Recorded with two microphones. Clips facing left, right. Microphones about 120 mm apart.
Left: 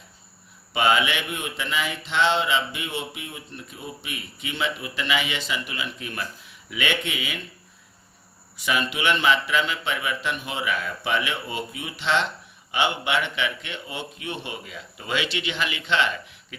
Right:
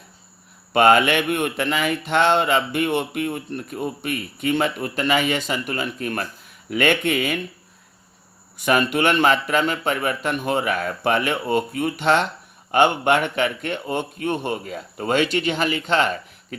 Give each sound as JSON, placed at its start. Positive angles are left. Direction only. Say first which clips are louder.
{"t": 0.7, "sound": "speech", "louder": "right 7 dB", "side_deg": -55}
{"t": 8.5, "sound": "speech", "louder": "right 7 dB", "side_deg": -50}